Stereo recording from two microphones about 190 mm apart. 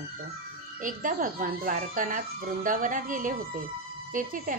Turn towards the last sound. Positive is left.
turn(degrees=-45)  # may be behind; listen again after turning